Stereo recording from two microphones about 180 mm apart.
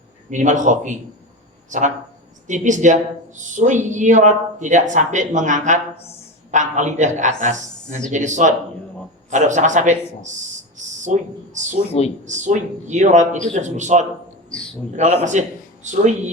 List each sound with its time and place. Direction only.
0.3 s a man's voice: 45° right (ahead or behind)